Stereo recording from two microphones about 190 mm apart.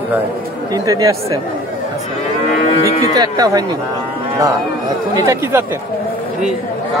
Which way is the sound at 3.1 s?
20° right (ahead or behind).